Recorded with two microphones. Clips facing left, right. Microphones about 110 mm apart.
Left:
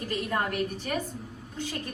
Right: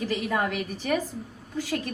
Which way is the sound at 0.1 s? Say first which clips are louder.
Even; 85° right.